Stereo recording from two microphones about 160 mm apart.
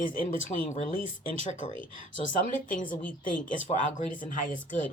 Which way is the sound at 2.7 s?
55° left (ahead or behind).